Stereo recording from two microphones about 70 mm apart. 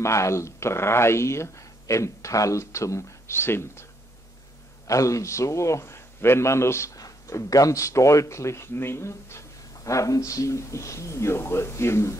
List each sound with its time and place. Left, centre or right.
0.0 s speech: left
4.8 s speech: left
7.0 s speech: left
9.8 s speech: left